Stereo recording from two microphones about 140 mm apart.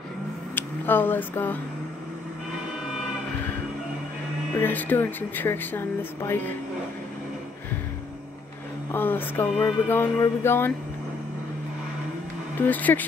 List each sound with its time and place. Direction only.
0.6 s speech: 15° left (ahead or behind)
4.6 s speech: 15° left (ahead or behind)
8.9 s speech: 15° left (ahead or behind)
12.5 s speech: 10° left (ahead or behind)